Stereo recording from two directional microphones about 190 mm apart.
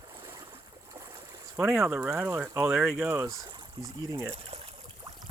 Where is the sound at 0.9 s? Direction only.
15° right (ahead or behind).